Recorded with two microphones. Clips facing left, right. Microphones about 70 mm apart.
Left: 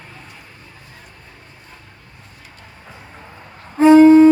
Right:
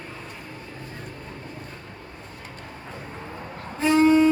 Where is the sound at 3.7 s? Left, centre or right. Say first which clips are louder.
Left 10 dB; left.